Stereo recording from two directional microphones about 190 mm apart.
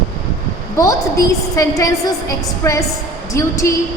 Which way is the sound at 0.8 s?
15° left (ahead or behind).